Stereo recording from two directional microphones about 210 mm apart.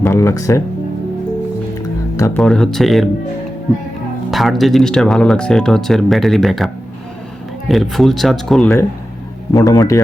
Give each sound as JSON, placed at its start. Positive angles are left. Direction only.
{"t": 0.0, "sound": "speech", "side_deg": 10}
{"t": 2.1, "sound": "speech", "side_deg": 15}
{"t": 2.4, "sound": "speech", "side_deg": 5}
{"t": 4.3, "sound": "speech", "side_deg": 0}
{"t": 7.7, "sound": "speech", "side_deg": 0}
{"t": 9.5, "sound": "a man's voice", "side_deg": 15}